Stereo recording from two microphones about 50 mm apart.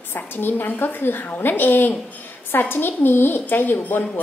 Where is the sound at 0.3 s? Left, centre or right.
Left.